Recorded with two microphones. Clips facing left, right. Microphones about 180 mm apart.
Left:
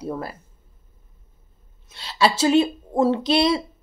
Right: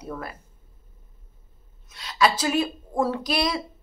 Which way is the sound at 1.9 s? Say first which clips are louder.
Left 1 dB; 30° left (ahead or behind).